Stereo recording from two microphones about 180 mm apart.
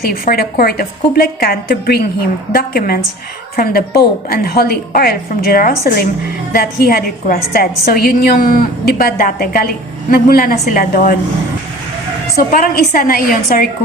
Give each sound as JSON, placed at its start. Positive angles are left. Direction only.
{"t": 0.0, "sound": "a woman's voice", "side_deg": 55}
{"t": 12.4, "sound": "a woman's voice", "side_deg": 55}